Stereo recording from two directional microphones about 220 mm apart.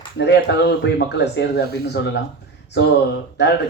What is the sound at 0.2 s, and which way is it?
Speech, 50° left (ahead or behind).